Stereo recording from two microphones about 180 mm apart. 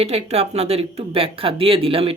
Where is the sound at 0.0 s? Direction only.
35° right (ahead or behind).